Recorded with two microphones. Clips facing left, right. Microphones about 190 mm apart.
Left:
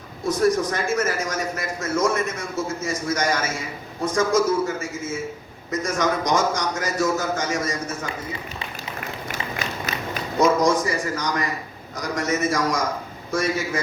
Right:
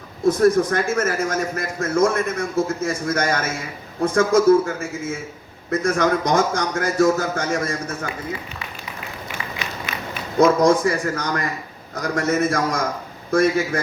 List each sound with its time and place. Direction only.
0.3 s speech: 55° right (ahead or behind)
5.8 s speech: 60° right (ahead or behind)
10.4 s speech: 60° right (ahead or behind)